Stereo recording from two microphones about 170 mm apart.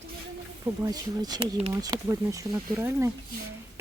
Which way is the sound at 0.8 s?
20° right (ahead or behind).